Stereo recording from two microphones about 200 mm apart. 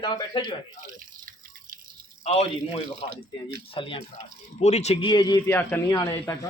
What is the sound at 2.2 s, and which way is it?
A man's voice, 30° left (ahead or behind).